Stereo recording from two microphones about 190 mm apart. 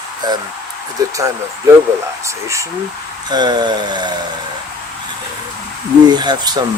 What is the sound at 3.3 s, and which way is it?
Speech, 20° right (ahead or behind).